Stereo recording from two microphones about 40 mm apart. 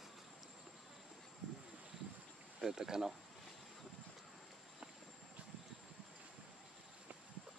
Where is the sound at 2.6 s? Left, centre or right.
Centre.